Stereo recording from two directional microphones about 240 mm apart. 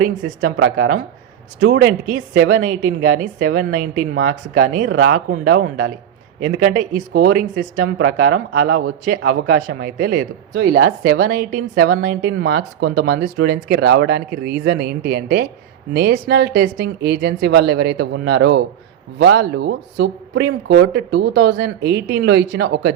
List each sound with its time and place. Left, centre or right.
0.0 s a woman's voice: right
5.3 s speech: right
6.7 s speech: right
7.8 s speech: right
11.3 s speech: right